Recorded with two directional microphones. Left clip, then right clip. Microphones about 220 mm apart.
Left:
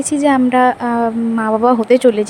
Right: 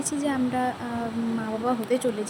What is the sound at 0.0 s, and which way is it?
Speech, 45° left (ahead or behind).